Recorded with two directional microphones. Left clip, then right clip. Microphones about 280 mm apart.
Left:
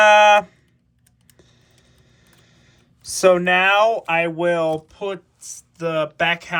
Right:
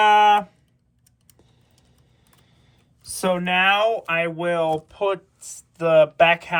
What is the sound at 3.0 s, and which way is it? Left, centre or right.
Speech, left.